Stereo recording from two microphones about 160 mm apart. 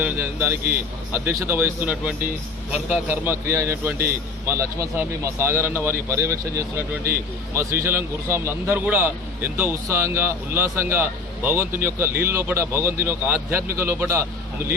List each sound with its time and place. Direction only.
0.0 s a man's voice: 15° right (ahead or behind)